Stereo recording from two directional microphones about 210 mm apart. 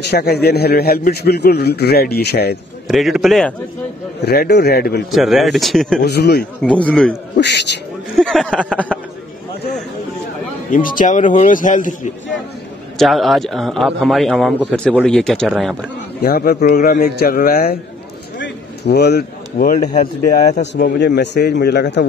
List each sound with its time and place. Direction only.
0.0 s a man's voice: 50° left (ahead or behind)
2.9 s a man's voice: centre (ahead or behind)
4.2 s a man's voice: 50° left (ahead or behind)
5.1 s a man's voice: centre (ahead or behind)
6.0 s a man's voice: 50° left (ahead or behind)
6.6 s a man's voice: 5° left (ahead or behind)
7.3 s a man's voice: 55° left (ahead or behind)
8.2 s a man's voice: centre (ahead or behind)
10.7 s speech: 40° left (ahead or behind)
12.9 s a man's voice: centre (ahead or behind)
16.2 s a man's voice: 45° left (ahead or behind)
18.4 s a sound: 50° left (ahead or behind)
20.6 s a man's voice: 55° left (ahead or behind)